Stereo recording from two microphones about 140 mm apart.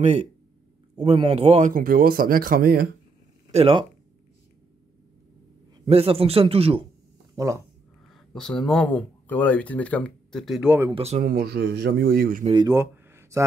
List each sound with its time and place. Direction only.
0.0 s a man's voice: 55° right (ahead or behind)
1.7 s speech: 85° right
3.5 s speech: 40° right (ahead or behind)
5.9 s a man's voice: 45° right (ahead or behind)
7.3 s speech: 20° right (ahead or behind)
8.4 s speech: 5° left (ahead or behind)
11.0 s a man's voice: 50° right (ahead or behind)
11.2 s speech: 90° right
12.4 s speech: 35° right (ahead or behind)
12.7 s a sound: 20° right (ahead or behind)